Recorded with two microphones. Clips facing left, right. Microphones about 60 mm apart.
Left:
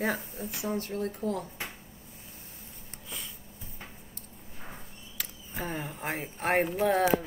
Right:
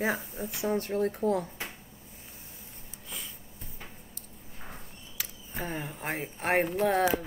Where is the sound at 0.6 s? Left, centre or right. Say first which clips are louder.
Right 4 dB; right.